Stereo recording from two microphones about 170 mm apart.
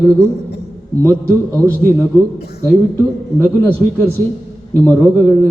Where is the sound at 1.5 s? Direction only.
10° left (ahead or behind).